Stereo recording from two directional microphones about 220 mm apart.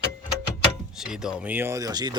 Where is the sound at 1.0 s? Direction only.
5° right (ahead or behind); by 2.2 s 20° right (ahead or behind).